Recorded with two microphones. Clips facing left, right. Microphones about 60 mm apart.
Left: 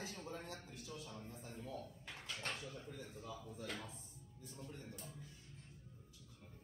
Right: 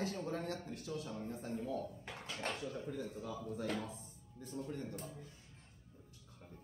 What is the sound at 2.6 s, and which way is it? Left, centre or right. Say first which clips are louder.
Speech: right 8 dB; right.